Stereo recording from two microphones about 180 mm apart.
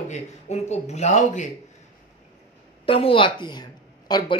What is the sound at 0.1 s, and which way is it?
Speech, 40° left (ahead or behind).